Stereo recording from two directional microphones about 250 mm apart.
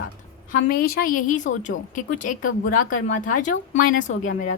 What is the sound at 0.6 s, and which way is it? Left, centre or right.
A woman's voice, left.